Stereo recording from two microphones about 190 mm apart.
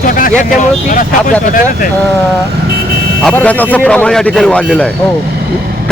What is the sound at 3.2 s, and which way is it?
Speech, 5° left (ahead or behind).